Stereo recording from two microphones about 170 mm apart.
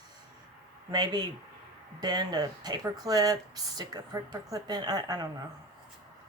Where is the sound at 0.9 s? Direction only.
25° right (ahead or behind).